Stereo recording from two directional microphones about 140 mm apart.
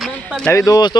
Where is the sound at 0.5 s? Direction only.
25° left (ahead or behind).